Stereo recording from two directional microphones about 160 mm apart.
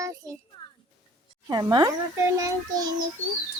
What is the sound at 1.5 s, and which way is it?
Speech, 25° right (ahead or behind).